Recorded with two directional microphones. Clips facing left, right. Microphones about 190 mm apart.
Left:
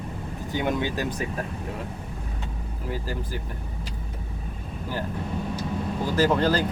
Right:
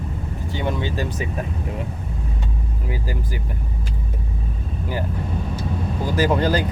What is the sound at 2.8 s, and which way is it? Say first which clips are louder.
Speech: right 1 dB; 10° right (ahead or behind).